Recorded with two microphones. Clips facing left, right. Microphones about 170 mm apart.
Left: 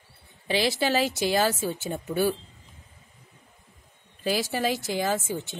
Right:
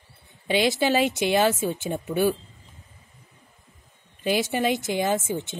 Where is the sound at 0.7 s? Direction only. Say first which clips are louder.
Right 3 dB; 20° right (ahead or behind).